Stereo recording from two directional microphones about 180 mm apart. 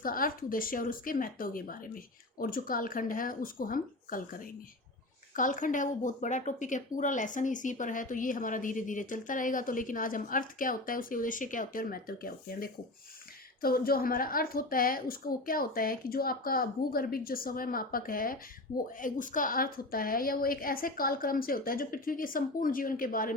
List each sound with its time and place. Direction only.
0.0 s speech: 50° left (ahead or behind)
5.3 s speech: 45° left (ahead or behind)